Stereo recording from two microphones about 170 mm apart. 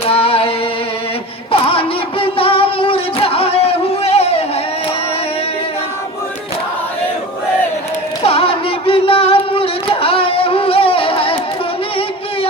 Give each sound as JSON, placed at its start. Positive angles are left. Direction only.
{"t": 0.1, "sound": "singing", "side_deg": 35}
{"t": 1.6, "sound": "music", "side_deg": 30}
{"t": 8.2, "sound": "a sound", "side_deg": 35}